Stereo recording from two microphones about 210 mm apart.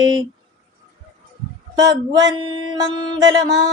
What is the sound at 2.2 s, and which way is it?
Music, 20° right (ahead or behind).